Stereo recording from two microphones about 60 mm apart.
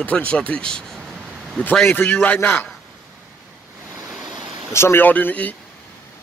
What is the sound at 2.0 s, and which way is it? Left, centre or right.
Speech, left.